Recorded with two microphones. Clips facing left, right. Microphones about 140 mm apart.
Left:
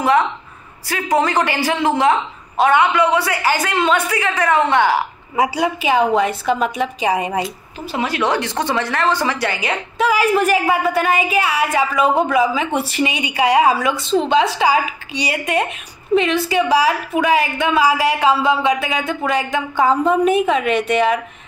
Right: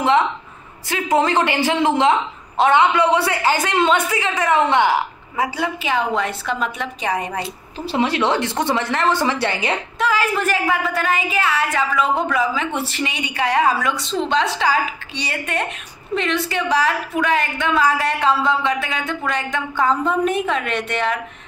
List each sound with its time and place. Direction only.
0.8 s a woman's voice: 20° right (ahead or behind)
5.3 s a woman's voice: 15° left (ahead or behind)
7.8 s a woman's voice: 25° right (ahead or behind)
9.9 s a woman's voice: 15° left (ahead or behind)